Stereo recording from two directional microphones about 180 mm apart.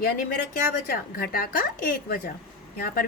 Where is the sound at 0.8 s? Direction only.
55° left (ahead or behind).